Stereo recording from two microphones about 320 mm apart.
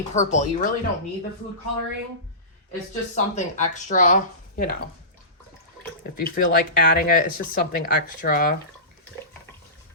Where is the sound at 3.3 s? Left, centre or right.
Left.